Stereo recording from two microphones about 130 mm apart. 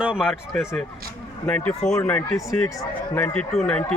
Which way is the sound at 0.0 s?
5° right (ahead or behind).